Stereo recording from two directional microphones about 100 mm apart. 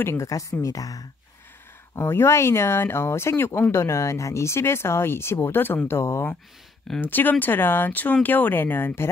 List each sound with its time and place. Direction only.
0.0 s a woman's voice: 25° left (ahead or behind)
2.0 s speech: 25° left (ahead or behind)